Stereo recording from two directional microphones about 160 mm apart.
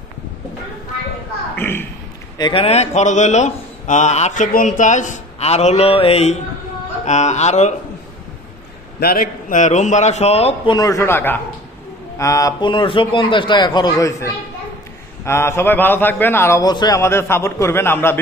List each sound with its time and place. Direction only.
1.6 s a sound: 15° left (ahead or behind)
2.3 s speech: 30° left (ahead or behind); by 7.7 s 45° left (ahead or behind)
9.0 s a man's voice: 60° left (ahead or behind); by 18.2 s 15° left (ahead or behind)